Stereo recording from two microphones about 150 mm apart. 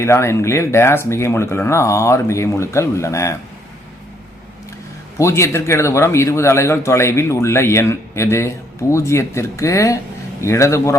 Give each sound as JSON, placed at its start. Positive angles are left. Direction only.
{"t": 0.0, "sound": "speech", "side_deg": 20}
{"t": 5.1, "sound": "speech", "side_deg": 20}